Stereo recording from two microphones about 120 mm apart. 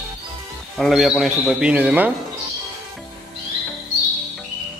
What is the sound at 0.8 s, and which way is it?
Speech, centre (ahead or behind).